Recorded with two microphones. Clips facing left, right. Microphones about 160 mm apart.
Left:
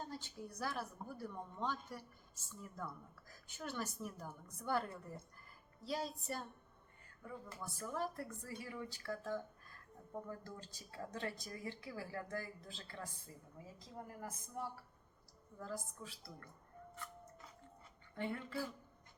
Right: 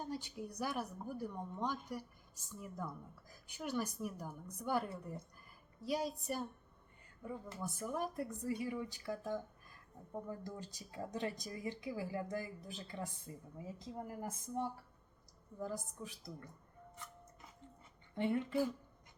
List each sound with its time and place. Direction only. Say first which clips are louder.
0.0 s a woman's voice: right 4 dB; 15° right (ahead or behind)
18.1 s a woman's voice: right 7 dB; 20° right (ahead or behind)